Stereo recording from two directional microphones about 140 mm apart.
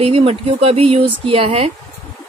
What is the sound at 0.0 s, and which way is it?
A woman's voice, 45° right (ahead or behind).